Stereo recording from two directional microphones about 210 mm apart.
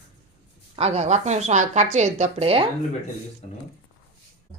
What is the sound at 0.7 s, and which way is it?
A woman's voice, 30° right (ahead or behind).